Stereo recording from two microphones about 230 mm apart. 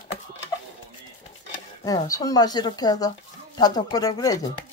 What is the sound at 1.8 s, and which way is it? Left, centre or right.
Speech, centre.